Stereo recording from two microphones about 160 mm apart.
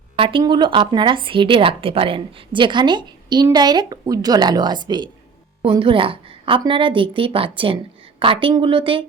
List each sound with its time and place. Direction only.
0.2 s a woman's voice: 30° right (ahead or behind)